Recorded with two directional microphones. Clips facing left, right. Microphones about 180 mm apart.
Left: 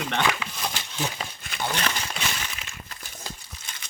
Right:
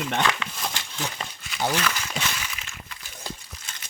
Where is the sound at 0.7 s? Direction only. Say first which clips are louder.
Left 2 dB; 15° left (ahead or behind).